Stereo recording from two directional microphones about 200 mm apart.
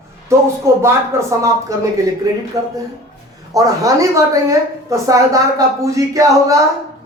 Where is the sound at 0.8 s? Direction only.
15° right (ahead or behind).